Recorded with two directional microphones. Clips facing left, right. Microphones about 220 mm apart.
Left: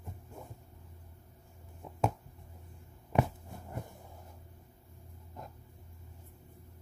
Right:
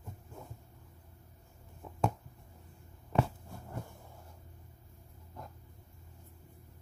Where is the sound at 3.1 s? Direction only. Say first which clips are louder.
Left 1 dB; 15° left (ahead or behind).